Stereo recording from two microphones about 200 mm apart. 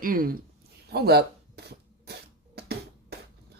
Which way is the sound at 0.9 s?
55° right (ahead or behind).